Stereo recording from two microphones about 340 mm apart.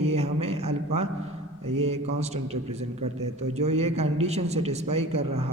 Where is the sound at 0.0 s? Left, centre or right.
Centre.